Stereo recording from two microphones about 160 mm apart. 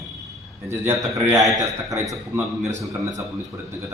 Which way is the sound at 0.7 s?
15° right (ahead or behind).